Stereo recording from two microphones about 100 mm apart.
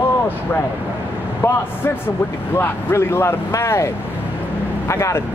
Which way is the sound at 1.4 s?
25° left (ahead or behind).